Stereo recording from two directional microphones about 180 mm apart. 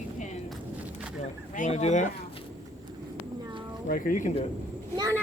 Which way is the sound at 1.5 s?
40° left (ahead or behind).